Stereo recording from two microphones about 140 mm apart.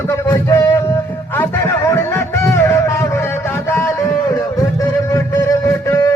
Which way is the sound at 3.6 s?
20° left (ahead or behind).